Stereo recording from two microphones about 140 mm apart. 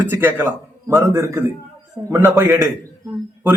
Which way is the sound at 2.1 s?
20° right (ahead or behind).